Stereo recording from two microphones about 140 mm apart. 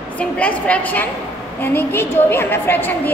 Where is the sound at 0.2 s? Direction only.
10° left (ahead or behind).